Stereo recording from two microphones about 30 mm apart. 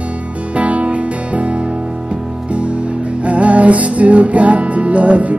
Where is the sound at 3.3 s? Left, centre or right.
Right.